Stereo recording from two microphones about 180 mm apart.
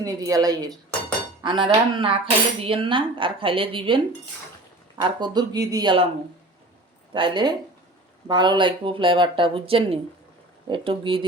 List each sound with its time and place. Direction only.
0.0 s speech: 20° right (ahead or behind)
7.1 s speech: 25° right (ahead or behind)